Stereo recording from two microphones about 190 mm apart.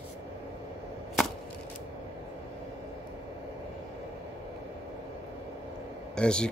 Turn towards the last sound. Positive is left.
turn(degrees=5)  # may be behind; listen again after turning